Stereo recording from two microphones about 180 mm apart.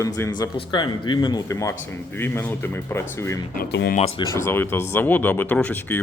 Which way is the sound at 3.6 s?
65° left (ahead or behind).